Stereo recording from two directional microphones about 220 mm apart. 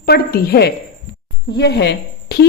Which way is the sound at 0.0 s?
45° left (ahead or behind).